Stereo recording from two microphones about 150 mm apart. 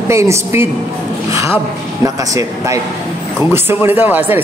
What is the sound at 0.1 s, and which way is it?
A woman's voice, 20° right (ahead or behind).